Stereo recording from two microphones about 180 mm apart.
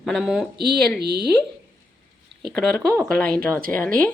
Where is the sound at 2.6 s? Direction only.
5° left (ahead or behind).